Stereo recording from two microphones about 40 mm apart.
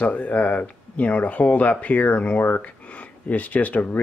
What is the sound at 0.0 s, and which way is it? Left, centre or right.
Speech, left.